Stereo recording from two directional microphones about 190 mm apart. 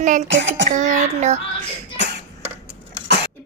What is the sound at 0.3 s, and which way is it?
Speech, 70° right (ahead or behind).